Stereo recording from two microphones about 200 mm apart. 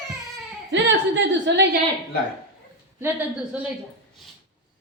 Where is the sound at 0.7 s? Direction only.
65° right (ahead or behind).